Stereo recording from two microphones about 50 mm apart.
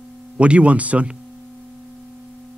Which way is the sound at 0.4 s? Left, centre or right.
Right.